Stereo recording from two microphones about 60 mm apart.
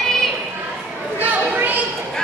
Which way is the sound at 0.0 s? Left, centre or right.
Centre.